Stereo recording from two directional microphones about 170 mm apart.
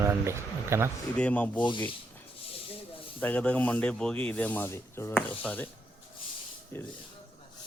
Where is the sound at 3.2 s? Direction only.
10° left (ahead or behind).